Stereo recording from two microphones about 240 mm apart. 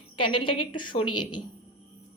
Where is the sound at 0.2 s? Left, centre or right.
Centre.